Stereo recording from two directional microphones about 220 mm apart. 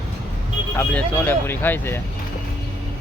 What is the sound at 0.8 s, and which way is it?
Speech, 10° left (ahead or behind).